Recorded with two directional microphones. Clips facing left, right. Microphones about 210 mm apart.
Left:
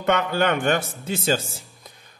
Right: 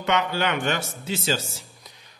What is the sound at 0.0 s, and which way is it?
A man's voice, 55° left (ahead or behind).